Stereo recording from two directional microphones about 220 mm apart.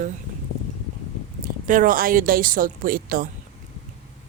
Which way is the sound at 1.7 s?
40° right (ahead or behind).